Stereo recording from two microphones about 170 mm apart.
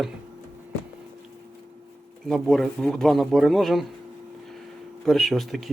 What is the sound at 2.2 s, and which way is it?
Speech, centre (ahead or behind).